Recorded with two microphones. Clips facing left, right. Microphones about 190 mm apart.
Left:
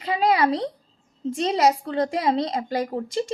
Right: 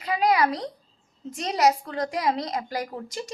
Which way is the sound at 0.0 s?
30° left (ahead or behind).